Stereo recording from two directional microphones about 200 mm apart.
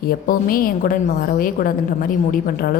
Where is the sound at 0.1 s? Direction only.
45° left (ahead or behind).